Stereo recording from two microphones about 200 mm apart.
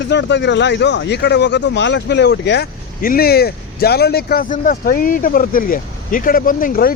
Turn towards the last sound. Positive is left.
turn(degrees=45)  # may be behind; listen again after turning